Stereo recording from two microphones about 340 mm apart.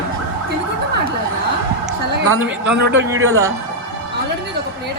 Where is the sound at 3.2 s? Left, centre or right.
Centre.